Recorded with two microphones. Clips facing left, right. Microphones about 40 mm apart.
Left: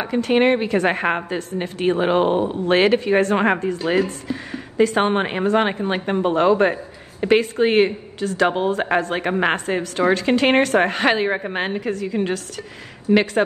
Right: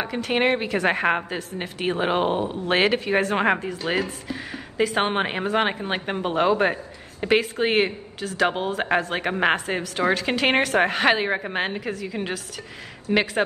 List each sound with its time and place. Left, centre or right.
0.0 s speech: centre